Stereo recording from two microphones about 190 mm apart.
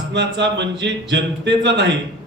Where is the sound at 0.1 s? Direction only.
65° right (ahead or behind).